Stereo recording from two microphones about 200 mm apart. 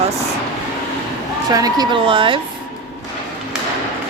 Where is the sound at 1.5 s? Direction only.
20° right (ahead or behind).